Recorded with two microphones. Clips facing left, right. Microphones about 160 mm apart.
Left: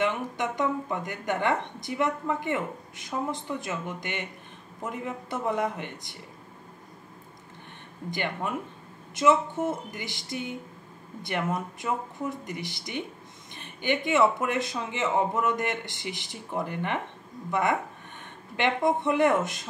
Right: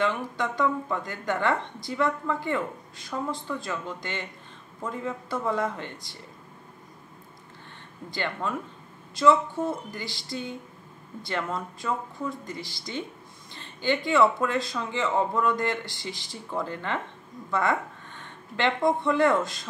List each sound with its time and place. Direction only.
0.0 s speech: 20° left (ahead or behind)
8.1 s speech: 20° left (ahead or behind)